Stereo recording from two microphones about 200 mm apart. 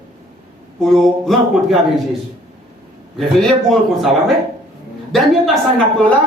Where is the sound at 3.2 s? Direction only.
Centre (ahead or behind).